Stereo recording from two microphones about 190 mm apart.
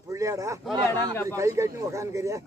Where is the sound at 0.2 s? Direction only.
15° right (ahead or behind).